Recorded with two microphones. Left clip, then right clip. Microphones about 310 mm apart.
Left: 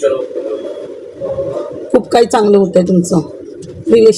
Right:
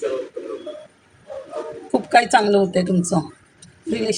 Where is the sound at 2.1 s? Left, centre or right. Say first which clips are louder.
Left 3 dB; right.